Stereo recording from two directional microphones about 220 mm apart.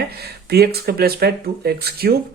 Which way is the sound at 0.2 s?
45° right (ahead or behind).